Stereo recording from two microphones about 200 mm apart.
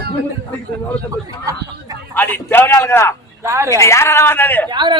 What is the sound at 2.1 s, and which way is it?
A man's voice, 10° left (ahead or behind).